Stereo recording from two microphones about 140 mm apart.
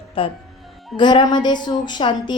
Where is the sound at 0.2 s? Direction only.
40° left (ahead or behind).